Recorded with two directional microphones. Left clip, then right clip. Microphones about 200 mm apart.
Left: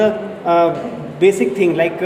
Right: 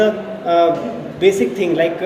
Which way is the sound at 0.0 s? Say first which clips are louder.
Even; 30° left (ahead or behind).